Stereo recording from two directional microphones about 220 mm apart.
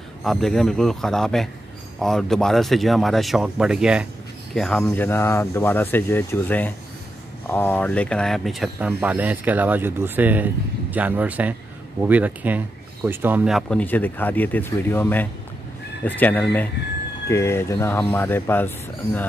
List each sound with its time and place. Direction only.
0.2 s speech: centre (ahead or behind)